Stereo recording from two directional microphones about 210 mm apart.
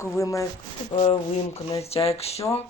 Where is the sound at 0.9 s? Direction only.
25° left (ahead or behind).